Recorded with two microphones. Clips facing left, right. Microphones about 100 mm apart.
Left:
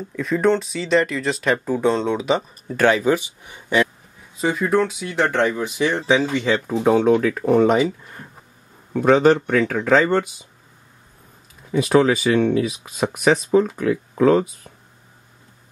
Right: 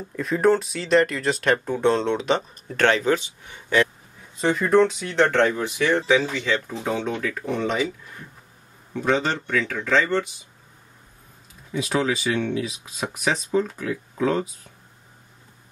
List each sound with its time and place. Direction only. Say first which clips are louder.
0.1 s speech: left 1 dB; centre (ahead or behind); by 3.8 s 15° left (ahead or behind)
4.4 s speech: right 1 dB; 5° left (ahead or behind); by 6.4 s 20° left (ahead or behind)
6.7 s speech: left 11 dB; 55° left (ahead or behind)
8.9 s speech: left 8 dB; 55° left (ahead or behind)
11.7 s speech: left 8 dB; 60° left (ahead or behind)